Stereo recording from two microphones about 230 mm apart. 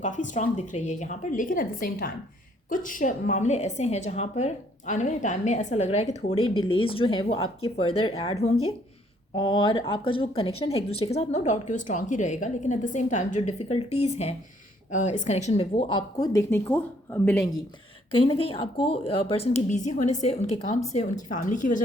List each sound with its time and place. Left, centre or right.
0.0 s a woman's voice: left; by 17.5 s centre
18.1 s a woman's voice: left